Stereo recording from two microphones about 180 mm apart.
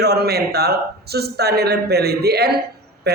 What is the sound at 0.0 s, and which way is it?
Speech, 60° right (ahead or behind).